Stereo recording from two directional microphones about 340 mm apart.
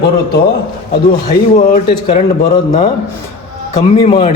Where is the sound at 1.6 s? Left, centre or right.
Left.